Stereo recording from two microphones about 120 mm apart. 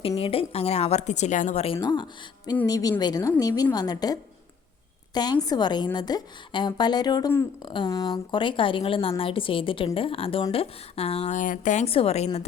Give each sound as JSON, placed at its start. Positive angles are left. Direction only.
{"t": 0.2, "sound": "a woman's voice", "side_deg": 50}
{"t": 1.8, "sound": "a woman's voice", "side_deg": 35}
{"t": 7.9, "sound": "a woman's voice", "side_deg": 30}
{"t": 11.9, "sound": "a woman's voice", "side_deg": 55}